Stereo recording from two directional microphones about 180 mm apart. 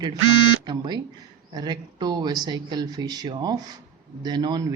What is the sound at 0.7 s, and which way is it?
Speech, 25° right (ahead or behind).